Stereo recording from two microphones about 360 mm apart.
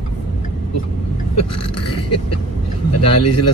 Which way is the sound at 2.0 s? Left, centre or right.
Left.